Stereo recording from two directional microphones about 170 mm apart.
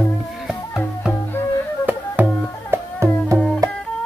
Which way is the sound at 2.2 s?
10° right (ahead or behind).